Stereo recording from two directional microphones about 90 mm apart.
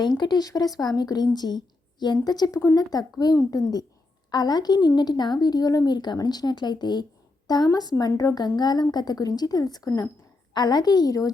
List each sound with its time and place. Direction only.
0.0 s a woman's voice: 55° left (ahead or behind)